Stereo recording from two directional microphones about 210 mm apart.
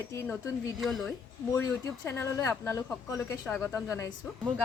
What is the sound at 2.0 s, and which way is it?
Speech, 10° left (ahead or behind).